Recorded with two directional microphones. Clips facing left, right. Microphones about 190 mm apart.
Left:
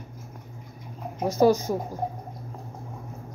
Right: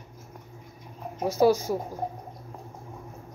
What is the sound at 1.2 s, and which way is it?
Speech, 5° right (ahead or behind).